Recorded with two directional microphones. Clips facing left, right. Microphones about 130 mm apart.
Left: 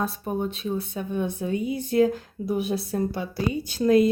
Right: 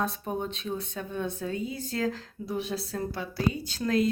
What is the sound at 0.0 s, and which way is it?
Speech, 5° left (ahead or behind).